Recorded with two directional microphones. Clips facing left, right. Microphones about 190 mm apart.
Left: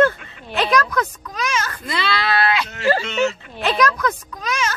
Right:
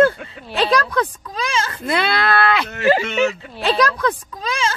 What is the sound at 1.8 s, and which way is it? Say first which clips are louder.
Speech: right 5 dB; 55° right (ahead or behind).